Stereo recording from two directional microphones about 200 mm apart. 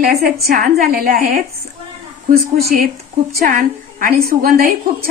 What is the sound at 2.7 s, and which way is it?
A woman's voice, 40° right (ahead or behind).